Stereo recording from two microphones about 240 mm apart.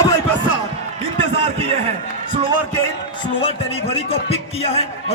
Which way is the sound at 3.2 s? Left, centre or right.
Left.